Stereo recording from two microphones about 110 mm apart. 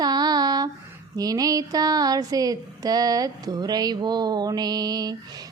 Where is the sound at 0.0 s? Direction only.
40° right (ahead or behind).